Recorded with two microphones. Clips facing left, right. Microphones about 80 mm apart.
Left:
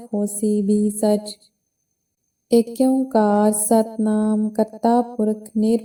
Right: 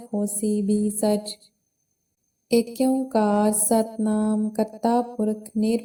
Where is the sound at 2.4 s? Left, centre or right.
Left.